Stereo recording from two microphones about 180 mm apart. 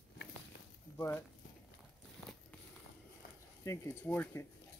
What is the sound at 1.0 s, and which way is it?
Speech, 15° left (ahead or behind).